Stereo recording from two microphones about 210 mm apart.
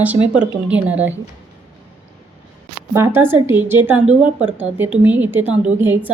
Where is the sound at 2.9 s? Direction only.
10° right (ahead or behind).